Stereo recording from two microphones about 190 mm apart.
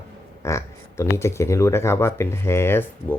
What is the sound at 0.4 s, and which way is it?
Speech, 15° left (ahead or behind).